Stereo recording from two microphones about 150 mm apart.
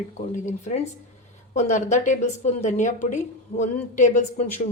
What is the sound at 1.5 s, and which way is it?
A man's voice, 50° left (ahead or behind).